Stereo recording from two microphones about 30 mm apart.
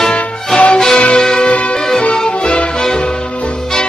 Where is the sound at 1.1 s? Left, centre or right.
Centre.